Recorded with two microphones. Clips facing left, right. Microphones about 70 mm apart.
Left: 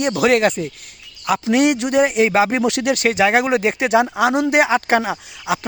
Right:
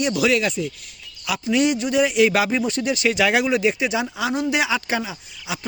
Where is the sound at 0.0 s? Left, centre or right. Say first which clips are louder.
Left 4 dB; left.